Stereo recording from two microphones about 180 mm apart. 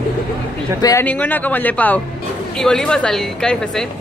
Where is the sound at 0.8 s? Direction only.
20° left (ahead or behind).